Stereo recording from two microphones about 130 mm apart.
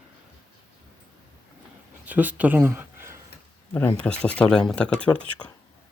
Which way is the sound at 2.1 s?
10° right (ahead or behind).